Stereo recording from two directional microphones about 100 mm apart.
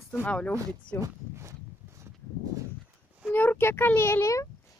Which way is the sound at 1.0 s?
30° right (ahead or behind).